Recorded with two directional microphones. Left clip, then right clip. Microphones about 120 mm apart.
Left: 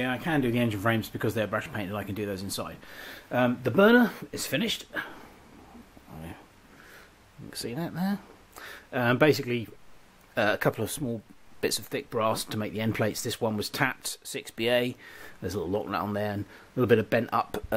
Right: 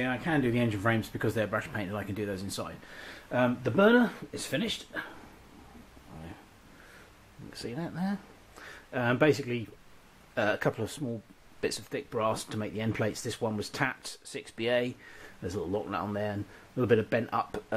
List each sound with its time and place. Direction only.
0.0 s speech: 20° left (ahead or behind)
7.5 s speech: 25° left (ahead or behind)